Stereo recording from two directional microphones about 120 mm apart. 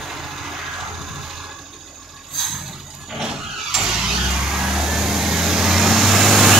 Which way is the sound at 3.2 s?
5° right (ahead or behind).